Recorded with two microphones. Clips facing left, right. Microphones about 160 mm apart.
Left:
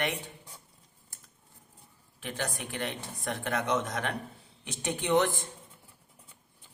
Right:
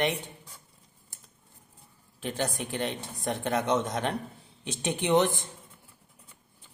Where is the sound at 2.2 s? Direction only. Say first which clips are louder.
Right 4 dB; 30° right (ahead or behind).